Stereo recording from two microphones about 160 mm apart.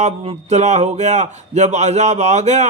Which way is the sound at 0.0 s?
45° right (ahead or behind).